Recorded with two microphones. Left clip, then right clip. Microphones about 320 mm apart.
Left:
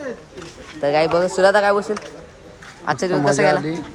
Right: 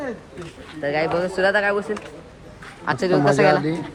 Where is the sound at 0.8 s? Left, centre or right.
Centre.